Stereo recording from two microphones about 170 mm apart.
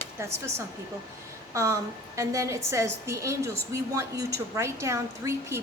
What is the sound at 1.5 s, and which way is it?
A woman's voice, 15° right (ahead or behind).